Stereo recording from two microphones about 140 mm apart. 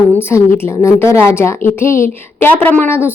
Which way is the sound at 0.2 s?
15° left (ahead or behind).